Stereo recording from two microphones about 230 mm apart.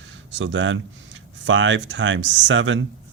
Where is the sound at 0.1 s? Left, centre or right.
Right.